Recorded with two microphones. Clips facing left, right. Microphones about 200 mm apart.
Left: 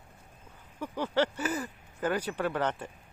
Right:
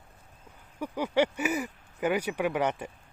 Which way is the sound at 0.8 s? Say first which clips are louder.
Right 2 dB; 15° right (ahead or behind).